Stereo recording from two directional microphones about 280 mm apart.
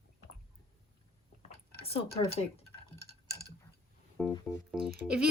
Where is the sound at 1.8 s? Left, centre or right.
Left.